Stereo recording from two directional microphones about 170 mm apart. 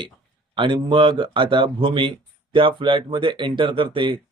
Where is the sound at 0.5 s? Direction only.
30° right (ahead or behind).